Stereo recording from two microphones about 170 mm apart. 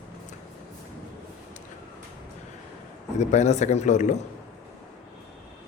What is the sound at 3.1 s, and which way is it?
A man's voice, 40° left (ahead or behind).